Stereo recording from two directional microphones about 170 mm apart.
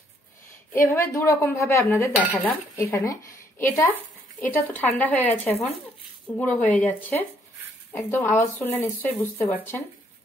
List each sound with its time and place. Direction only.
0.7 s speech: 15° left (ahead or behind)